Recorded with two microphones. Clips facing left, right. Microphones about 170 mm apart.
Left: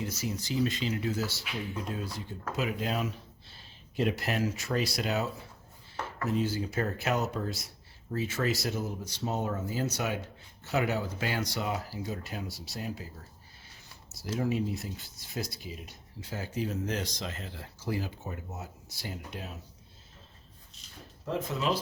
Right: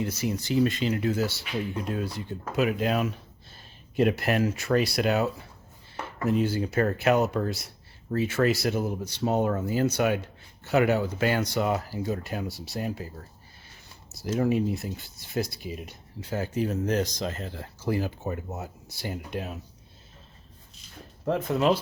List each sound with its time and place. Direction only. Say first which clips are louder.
0.0 s speech: right 6 dB; 60° right (ahead or behind)
14.1 s speech: right 6 dB; 60° right (ahead or behind)
21.2 s speech: right 7 dB; 60° right (ahead or behind)